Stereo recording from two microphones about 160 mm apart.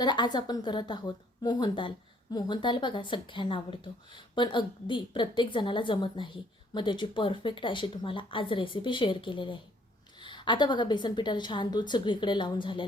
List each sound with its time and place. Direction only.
0.0 s a woman's voice: 25° left (ahead or behind)